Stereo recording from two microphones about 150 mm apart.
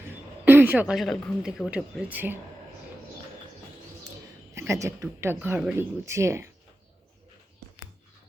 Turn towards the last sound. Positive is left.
turn(degrees=-20)  # may be behind; listen again after turning